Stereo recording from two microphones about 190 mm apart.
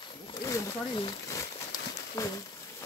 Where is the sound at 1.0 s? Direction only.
20° left (ahead or behind).